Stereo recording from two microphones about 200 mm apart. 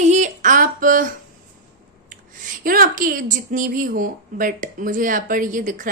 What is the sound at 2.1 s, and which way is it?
A woman's voice, 40° right (ahead or behind).